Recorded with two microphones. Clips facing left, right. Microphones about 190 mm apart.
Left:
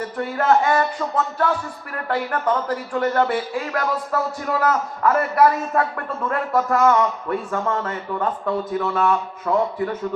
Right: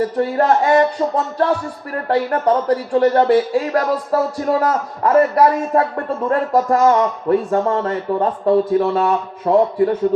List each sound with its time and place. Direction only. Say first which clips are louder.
0.2 s music: right 1 dB; 30° right (ahead or behind)